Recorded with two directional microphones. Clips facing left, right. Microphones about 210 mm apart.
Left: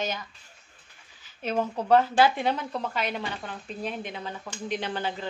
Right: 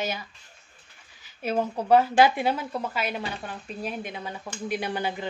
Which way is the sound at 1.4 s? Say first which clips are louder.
Right 1 dB; 10° right (ahead or behind).